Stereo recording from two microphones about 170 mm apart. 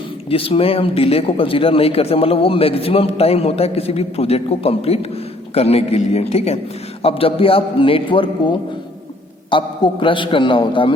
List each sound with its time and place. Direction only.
0.3 s a man's voice: 35° left (ahead or behind)